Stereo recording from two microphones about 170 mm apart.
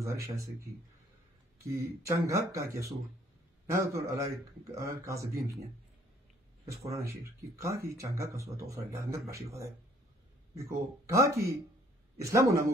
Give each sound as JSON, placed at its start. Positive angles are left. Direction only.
{"t": 0.0, "sound": "speech", "side_deg": -15}
{"t": 7.0, "sound": "speech", "side_deg": -15}